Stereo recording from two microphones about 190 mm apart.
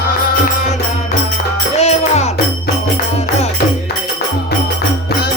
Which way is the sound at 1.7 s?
35° left (ahead or behind).